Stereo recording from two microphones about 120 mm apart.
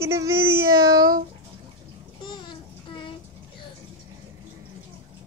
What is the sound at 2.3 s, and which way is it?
Child singing, 40° left (ahead or behind).